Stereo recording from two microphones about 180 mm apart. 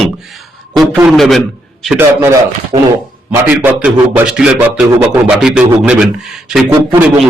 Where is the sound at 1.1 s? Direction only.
Centre (ahead or behind).